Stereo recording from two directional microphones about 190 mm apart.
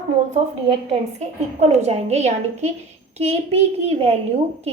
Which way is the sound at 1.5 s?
35° right (ahead or behind).